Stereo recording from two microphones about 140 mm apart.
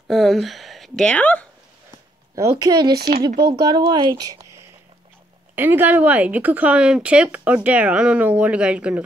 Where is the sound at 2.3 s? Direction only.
25° right (ahead or behind).